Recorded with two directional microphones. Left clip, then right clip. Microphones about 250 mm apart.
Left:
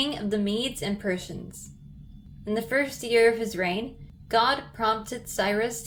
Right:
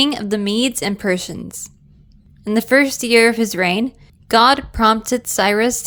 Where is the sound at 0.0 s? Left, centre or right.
Right.